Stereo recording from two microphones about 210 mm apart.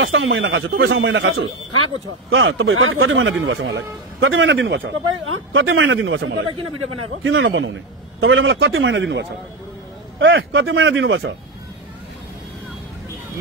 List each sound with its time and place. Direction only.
0.0 s a man's voice: 65° right (ahead or behind)